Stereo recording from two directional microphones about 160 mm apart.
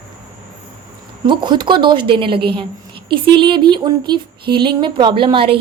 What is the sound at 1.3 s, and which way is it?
A woman's voice, 30° right (ahead or behind).